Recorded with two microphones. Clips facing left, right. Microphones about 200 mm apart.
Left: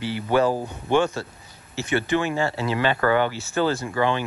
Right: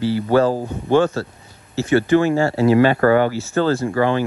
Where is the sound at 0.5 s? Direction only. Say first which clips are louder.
Right 4 dB; 15° right (ahead or behind).